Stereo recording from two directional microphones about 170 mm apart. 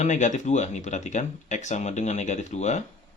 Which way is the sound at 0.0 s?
45° left (ahead or behind).